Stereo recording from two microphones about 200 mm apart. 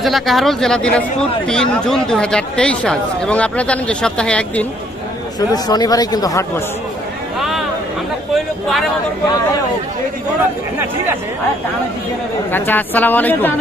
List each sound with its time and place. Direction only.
0.0 s speech: centre (ahead or behind)
5.5 s speech: 20° left (ahead or behind)
7.3 s a sound: centre (ahead or behind)
12.4 s a woman's voice: 10° left (ahead or behind)